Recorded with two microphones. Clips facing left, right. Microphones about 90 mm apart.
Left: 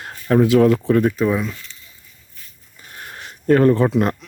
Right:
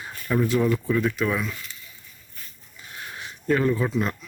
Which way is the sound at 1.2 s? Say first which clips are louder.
Left 6 dB; 35° left (ahead or behind).